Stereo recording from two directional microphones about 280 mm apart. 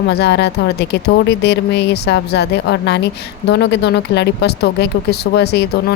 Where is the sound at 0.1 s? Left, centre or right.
Left.